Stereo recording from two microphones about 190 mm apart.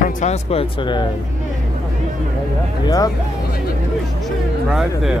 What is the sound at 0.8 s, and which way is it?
Speech, 25° left (ahead or behind).